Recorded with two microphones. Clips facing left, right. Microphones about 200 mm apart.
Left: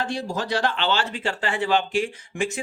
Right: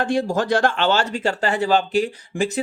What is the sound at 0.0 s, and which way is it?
Speech, 50° right (ahead or behind).